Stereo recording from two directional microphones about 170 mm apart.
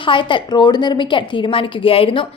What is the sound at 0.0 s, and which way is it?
A woman's voice, 30° left (ahead or behind).